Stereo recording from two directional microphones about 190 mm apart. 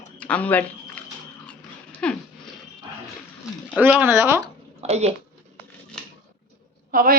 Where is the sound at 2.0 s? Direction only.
5° left (ahead or behind).